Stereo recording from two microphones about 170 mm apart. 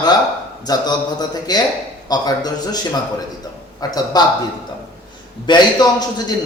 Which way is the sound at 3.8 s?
20° left (ahead or behind).